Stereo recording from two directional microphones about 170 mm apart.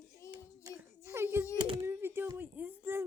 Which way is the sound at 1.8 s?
15° right (ahead or behind).